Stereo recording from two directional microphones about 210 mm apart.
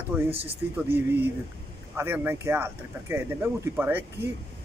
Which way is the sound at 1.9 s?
10° right (ahead or behind).